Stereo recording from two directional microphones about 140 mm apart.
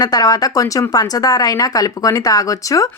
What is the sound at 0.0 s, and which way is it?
A woman's voice, 25° left (ahead or behind).